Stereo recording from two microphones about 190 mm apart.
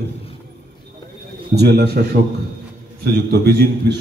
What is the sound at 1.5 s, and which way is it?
Speech, 60° right (ahead or behind).